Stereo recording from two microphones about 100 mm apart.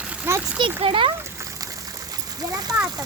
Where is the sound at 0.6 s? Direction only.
60° right (ahead or behind).